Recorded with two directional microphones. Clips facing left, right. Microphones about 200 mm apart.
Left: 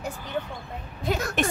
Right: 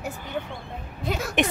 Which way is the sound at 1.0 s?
Centre (ahead or behind).